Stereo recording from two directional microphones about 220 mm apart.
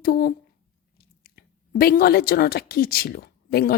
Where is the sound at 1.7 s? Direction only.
40° left (ahead or behind).